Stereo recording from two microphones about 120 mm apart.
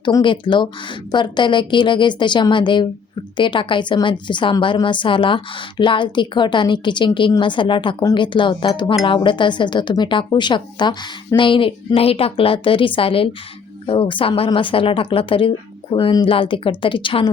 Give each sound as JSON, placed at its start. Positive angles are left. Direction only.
{"t": 0.0, "sound": "a woman's voice", "side_deg": 40}